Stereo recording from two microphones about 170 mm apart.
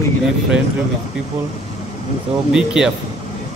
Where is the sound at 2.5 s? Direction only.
5° right (ahead or behind).